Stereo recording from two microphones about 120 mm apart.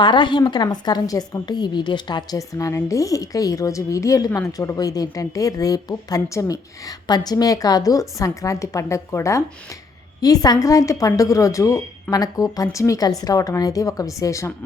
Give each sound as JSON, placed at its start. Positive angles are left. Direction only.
{"t": 0.0, "sound": "a woman's voice", "side_deg": 40}